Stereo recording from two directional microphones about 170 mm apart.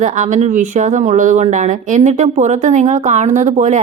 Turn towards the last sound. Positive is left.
turn(degrees=-45)  # may be behind; listen again after turning